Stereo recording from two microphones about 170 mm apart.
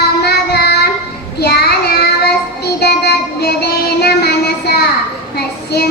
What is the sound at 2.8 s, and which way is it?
Music, 70° left (ahead or behind).